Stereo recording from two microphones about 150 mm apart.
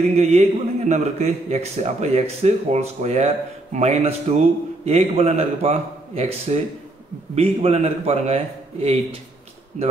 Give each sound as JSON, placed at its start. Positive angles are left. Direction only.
{"t": 0.1, "sound": "a man's voice", "side_deg": -45}